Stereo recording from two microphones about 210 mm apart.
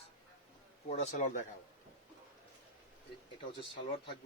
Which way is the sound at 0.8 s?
35° left (ahead or behind).